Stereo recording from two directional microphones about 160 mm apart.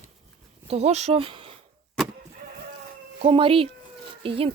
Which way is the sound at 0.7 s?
40° right (ahead or behind).